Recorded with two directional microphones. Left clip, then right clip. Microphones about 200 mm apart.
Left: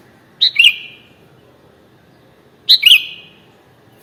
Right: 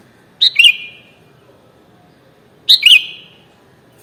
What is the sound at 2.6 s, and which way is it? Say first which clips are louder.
Bird: right 1 dB; 10° right (ahead or behind).